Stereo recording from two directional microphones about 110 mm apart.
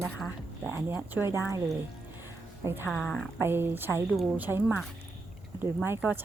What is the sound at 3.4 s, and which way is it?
Speech, 20° right (ahead or behind).